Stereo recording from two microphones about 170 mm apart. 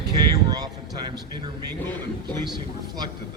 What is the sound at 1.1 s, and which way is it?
A man's voice, 25° right (ahead or behind).